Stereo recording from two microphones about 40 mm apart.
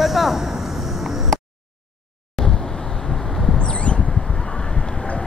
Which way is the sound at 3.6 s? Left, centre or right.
Left.